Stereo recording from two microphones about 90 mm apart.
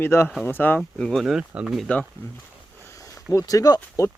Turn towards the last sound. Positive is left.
turn(degrees=40)  # may be behind; listen again after turning